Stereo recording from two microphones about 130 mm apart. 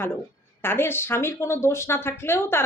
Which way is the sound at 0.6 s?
15° left (ahead or behind).